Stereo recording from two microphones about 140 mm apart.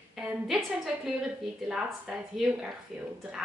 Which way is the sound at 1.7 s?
5° right (ahead or behind).